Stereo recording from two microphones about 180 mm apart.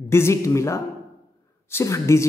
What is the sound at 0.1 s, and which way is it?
Mantra, 15° left (ahead or behind).